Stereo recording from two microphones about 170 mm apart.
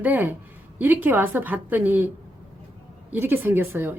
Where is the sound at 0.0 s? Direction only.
10° right (ahead or behind).